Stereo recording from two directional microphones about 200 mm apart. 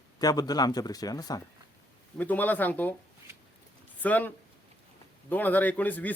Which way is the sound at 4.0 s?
10° left (ahead or behind).